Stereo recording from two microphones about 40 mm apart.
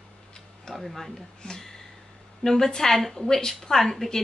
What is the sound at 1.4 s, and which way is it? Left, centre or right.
A woman's voice, centre.